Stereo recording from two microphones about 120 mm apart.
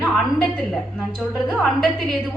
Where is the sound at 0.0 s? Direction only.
Centre (ahead or behind).